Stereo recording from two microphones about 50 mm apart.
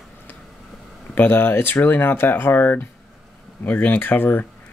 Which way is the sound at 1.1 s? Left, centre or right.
Left.